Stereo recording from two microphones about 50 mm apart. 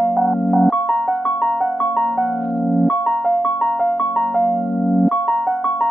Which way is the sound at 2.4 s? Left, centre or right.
Centre.